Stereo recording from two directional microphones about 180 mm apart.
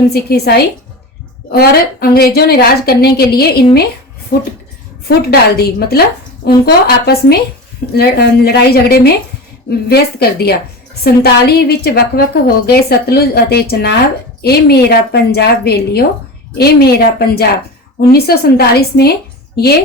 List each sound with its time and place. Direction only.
0.1 s a woman's voice: 60° left (ahead or behind)
5.0 s a woman's voice: 60° left (ahead or behind)